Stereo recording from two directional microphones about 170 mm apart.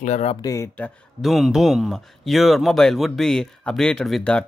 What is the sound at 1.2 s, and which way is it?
Speech, centre (ahead or behind).